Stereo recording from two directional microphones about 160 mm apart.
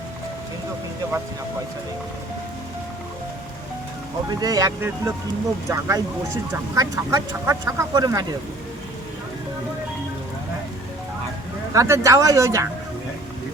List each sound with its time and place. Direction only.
4.3 s speech: 25° right (ahead or behind)
11.7 s speech: 20° right (ahead or behind)